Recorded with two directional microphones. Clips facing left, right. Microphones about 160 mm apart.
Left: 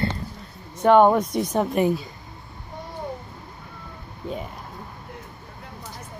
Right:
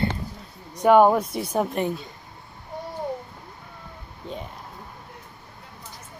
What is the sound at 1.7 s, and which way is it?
Music, 5° left (ahead or behind).